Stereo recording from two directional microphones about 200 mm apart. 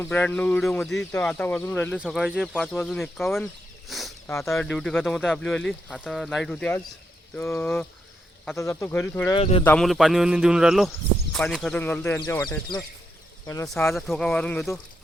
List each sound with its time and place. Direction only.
0.0 s speech: 10° left (ahead or behind)
4.3 s speech: 15° left (ahead or behind)
4.5 s speech: centre (ahead or behind)
9.3 s speech: 30° left (ahead or behind)
9.6 s speech: 5° left (ahead or behind)
13.8 s speech: centre (ahead or behind)